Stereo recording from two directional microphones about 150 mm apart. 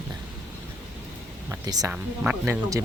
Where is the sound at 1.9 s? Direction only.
10° right (ahead or behind).